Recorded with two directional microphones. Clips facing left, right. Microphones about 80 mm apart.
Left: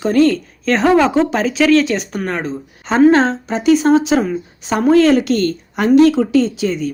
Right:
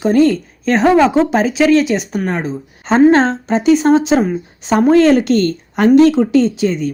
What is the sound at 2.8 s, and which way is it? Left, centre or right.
Speech, right.